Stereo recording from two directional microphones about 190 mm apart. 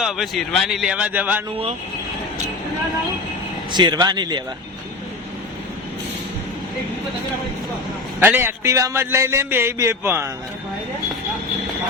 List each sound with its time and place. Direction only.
0.0 s speech: centre (ahead or behind)
3.7 s speech: 25° right (ahead or behind)
8.2 s a man's voice: 10° right (ahead or behind)